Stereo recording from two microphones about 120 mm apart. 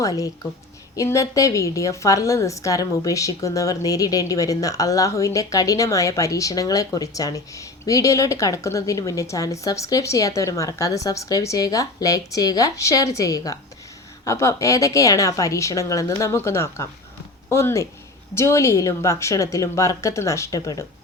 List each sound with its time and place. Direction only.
0.0 s a woman's voice: 30° left (ahead or behind)